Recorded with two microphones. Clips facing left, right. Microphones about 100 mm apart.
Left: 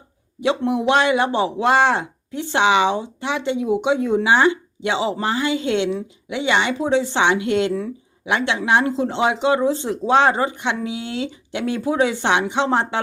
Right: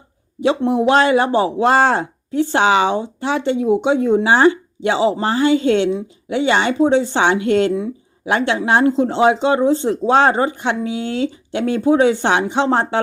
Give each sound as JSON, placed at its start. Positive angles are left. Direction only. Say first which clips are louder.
{"t": 0.4, "sound": "a man's voice", "louder": "right 4 dB", "side_deg": -35}